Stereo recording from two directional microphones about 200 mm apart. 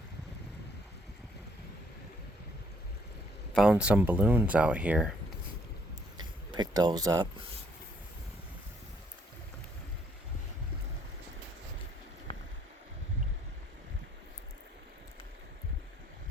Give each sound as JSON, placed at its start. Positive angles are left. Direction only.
{"t": 3.5, "sound": "speech", "side_deg": -5}
{"t": 6.5, "sound": "speech", "side_deg": -20}
{"t": 12.3, "sound": "a sound", "side_deg": 25}